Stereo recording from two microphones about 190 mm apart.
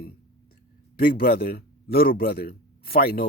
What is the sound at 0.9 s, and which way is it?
A man's voice, 50° left (ahead or behind).